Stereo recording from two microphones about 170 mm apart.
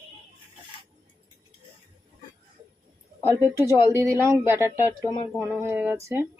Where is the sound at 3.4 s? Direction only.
15° right (ahead or behind).